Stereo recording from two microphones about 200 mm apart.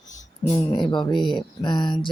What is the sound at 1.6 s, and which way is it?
Speech, 20° left (ahead or behind).